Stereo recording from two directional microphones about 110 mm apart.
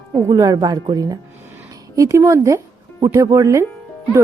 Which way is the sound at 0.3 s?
35° right (ahead or behind).